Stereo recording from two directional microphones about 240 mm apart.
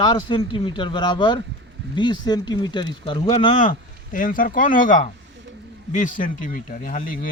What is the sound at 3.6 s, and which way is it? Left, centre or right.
Speech, left.